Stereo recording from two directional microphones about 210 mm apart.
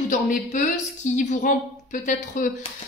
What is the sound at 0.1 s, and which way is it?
A woman's voice, 35° left (ahead or behind).